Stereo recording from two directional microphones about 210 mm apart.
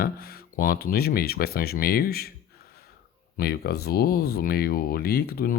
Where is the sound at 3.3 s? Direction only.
50° left (ahead or behind).